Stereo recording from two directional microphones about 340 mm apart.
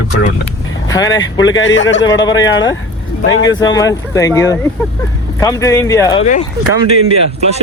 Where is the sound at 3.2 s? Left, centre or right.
Left.